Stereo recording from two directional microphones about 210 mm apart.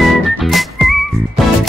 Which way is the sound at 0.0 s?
Centre (ahead or behind).